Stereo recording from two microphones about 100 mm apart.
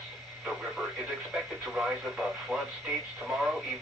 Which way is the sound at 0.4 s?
Centre (ahead or behind).